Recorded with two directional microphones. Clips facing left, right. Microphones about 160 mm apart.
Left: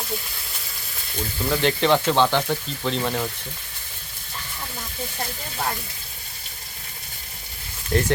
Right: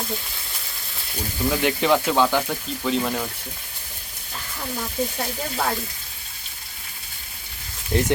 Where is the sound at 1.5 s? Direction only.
5° right (ahead or behind).